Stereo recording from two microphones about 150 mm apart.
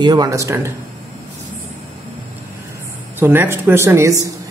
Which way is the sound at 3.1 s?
15° right (ahead or behind).